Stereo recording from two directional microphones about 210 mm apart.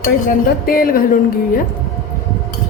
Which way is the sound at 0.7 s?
45° left (ahead or behind).